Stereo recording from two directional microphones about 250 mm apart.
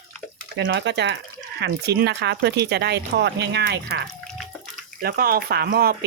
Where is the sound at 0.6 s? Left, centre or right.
Right.